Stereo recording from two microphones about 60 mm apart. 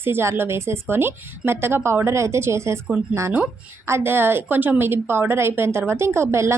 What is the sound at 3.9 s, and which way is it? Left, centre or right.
A woman's voice, right.